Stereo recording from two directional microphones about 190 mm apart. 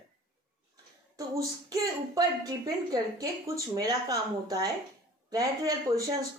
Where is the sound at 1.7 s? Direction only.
20° right (ahead or behind).